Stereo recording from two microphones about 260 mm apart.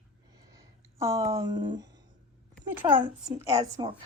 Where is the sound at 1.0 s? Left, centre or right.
Centre.